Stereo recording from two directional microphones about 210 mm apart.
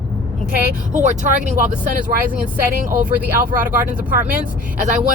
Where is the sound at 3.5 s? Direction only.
40° right (ahead or behind).